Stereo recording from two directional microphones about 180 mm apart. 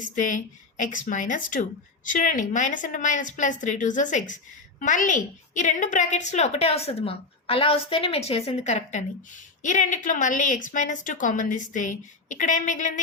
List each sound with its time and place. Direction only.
0.0 s a woman's voice: 45° left (ahead or behind)